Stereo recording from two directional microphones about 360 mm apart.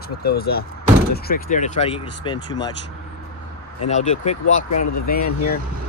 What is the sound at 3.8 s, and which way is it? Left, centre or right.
Speech, centre.